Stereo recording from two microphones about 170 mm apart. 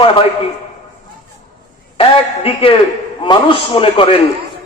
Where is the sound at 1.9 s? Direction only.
35° left (ahead or behind).